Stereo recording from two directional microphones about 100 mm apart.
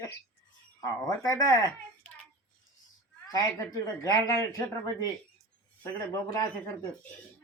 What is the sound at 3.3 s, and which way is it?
Speech, 35° left (ahead or behind).